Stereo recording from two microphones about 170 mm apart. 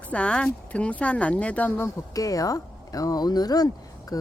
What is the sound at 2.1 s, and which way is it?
Speech, 20° left (ahead or behind).